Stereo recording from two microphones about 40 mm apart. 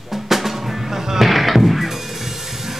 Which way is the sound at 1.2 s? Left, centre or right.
Centre.